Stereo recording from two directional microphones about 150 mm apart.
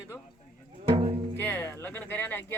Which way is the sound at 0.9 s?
40° right (ahead or behind).